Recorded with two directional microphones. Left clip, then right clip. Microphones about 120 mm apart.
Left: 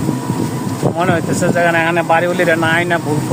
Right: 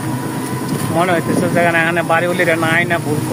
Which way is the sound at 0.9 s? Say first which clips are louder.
Right 3 dB; 30° left (ahead or behind).